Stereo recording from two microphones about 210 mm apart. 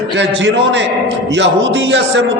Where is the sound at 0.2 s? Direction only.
60° right (ahead or behind).